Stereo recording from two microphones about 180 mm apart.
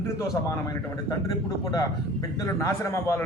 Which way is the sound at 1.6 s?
20° left (ahead or behind).